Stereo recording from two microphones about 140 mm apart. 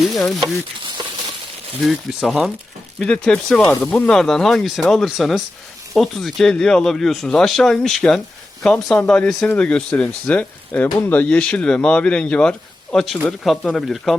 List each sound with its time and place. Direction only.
0.0 s speech: centre (ahead or behind)
0.3 s frying: 35° right (ahead or behind)
1.8 s speech: centre (ahead or behind)